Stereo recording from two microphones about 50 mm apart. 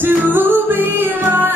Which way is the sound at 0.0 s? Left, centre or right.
Right.